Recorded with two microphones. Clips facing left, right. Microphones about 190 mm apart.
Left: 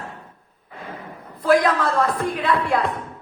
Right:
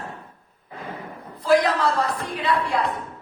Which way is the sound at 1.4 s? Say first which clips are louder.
Left 1 dB; 50° left (ahead or behind).